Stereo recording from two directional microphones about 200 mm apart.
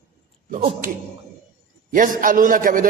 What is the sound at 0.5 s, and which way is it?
Speech, 30° right (ahead or behind).